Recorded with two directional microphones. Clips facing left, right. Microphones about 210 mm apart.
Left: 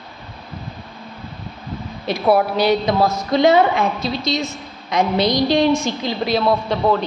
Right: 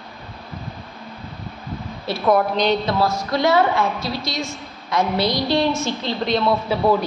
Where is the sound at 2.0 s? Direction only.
15° left (ahead or behind).